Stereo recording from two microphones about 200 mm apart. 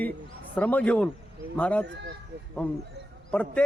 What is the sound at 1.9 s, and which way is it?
Speech, 60° right (ahead or behind).